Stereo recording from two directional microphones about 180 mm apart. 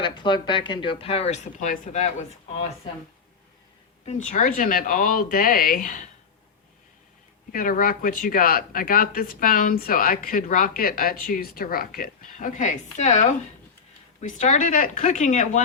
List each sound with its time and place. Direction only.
0.0 s speech: 25° left (ahead or behind)
4.0 s speech: 40° left (ahead or behind)
7.5 s speech: 50° left (ahead or behind)